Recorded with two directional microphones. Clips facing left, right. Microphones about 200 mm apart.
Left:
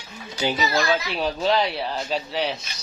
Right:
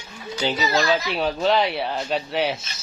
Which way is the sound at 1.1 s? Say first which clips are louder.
Right 1 dB; centre (ahead or behind).